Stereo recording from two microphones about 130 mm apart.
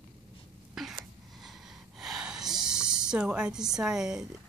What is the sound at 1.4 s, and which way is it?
Gasp, centre (ahead or behind).